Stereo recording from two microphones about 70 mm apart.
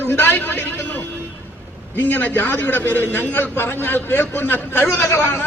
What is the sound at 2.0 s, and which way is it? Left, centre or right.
A man's voice, left.